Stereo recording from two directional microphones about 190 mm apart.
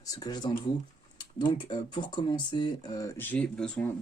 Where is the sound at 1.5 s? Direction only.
25° left (ahead or behind).